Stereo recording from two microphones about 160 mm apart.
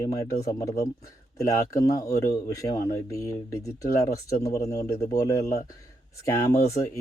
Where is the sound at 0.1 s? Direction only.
20° left (ahead or behind).